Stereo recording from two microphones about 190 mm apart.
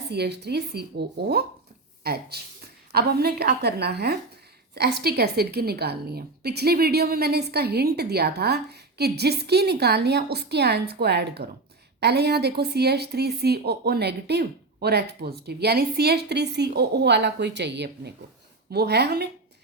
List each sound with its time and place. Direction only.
0.1 s a woman's voice: 60° right (ahead or behind)